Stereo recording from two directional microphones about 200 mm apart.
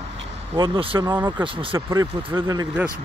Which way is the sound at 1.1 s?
10° right (ahead or behind).